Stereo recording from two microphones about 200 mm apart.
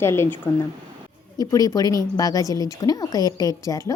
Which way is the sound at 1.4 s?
20° left (ahead or behind).